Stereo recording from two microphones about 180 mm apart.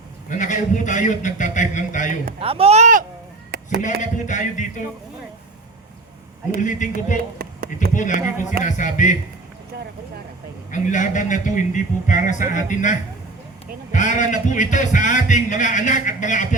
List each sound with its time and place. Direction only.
0.3 s a man's voice: 45° left (ahead or behind)
2.4 s speech: 30° right (ahead or behind)
3.5 s a sound: 65° right (ahead or behind)
4.0 s a man's voice: 45° left (ahead or behind)
6.6 s a man's voice: 45° left (ahead or behind)
7.3 s a sound: 55° right (ahead or behind)
7.9 s a man's voice: 45° left (ahead or behind)
9.7 s vehicle: 65° right (ahead or behind)
10.7 s a man's voice: 45° left (ahead or behind)